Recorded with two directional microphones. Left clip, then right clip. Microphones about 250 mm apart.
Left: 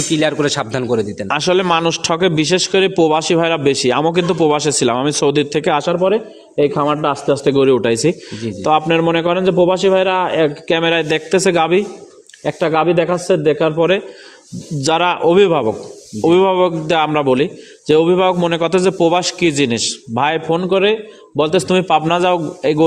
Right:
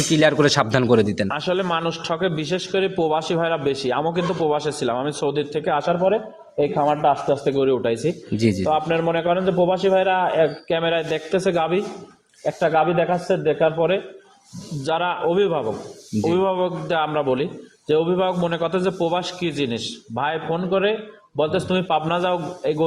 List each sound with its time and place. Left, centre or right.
0.1 s a man's voice: centre
1.3 s a man's voice: left